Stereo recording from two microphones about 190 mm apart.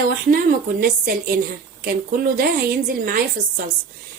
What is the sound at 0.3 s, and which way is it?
Speech, 50° right (ahead or behind).